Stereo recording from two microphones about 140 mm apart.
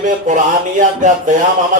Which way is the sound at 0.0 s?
65° right (ahead or behind).